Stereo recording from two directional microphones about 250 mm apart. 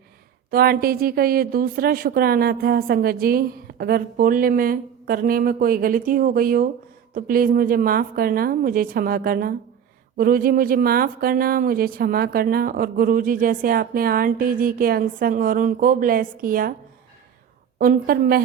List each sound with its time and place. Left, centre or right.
0.5 s speech: right
17.7 s speech: right